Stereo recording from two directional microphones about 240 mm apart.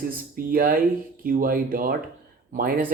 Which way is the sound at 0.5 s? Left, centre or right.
Right.